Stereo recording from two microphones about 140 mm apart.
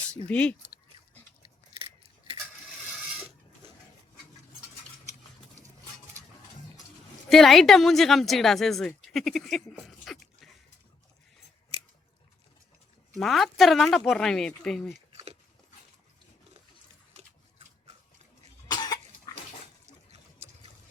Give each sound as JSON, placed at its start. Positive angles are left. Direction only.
{"t": 0.3, "sound": "speech", "side_deg": 10}
{"t": 2.8, "sound": "mechanisms", "side_deg": -5}
{"t": 7.3, "sound": "a woman's voice", "side_deg": 0}
{"t": 13.1, "sound": "speech", "side_deg": 0}
{"t": 15.1, "sound": "a sound", "side_deg": -45}
{"t": 18.7, "sound": "cough", "side_deg": 30}